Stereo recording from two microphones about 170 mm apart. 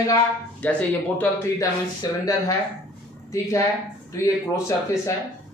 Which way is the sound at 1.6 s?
20° left (ahead or behind).